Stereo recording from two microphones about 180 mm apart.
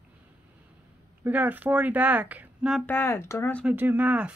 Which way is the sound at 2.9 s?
10° left (ahead or behind).